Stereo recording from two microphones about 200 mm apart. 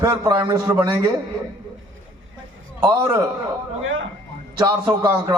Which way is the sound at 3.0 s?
15° right (ahead or behind).